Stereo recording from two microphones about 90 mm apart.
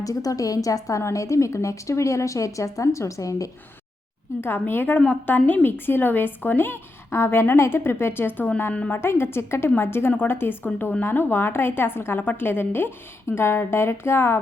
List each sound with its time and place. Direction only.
0.0 s a woman's voice: 40° left (ahead or behind)
4.4 s a woman's voice: 25° left (ahead or behind)